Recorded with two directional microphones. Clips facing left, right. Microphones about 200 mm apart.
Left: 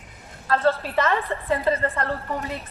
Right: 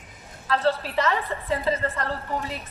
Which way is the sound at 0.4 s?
50° left (ahead or behind).